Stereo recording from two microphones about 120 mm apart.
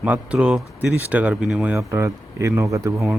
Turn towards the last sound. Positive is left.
turn(degrees=-25)  # may be behind; listen again after turning